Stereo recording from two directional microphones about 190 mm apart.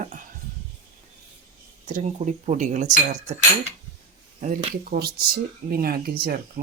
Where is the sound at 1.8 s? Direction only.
40° right (ahead or behind).